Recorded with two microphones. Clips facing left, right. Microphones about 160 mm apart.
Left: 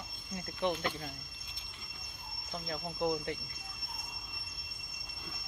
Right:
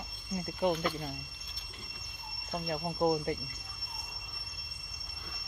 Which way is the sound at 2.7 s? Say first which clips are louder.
Right 4 dB; 35° right (ahead or behind).